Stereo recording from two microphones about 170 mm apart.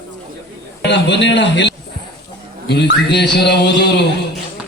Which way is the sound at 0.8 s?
90° left.